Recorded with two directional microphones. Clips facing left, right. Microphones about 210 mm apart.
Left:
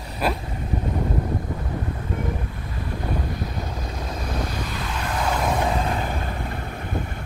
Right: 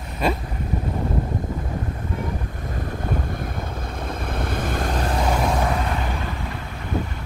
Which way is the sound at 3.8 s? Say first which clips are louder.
Right 1 dB; 55° right (ahead or behind).